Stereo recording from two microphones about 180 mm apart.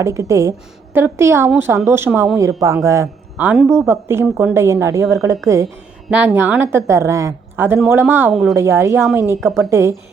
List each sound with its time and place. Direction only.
0.0 s speech: 15° right (ahead or behind)
8.3 s speech: centre (ahead or behind)
8.5 s speech: 15° right (ahead or behind)